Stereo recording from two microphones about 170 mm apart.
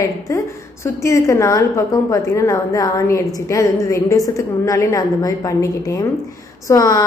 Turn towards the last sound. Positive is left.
turn(degrees=20)  # may be behind; listen again after turning